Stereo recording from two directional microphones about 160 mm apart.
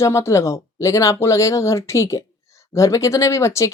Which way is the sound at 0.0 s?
20° left (ahead or behind).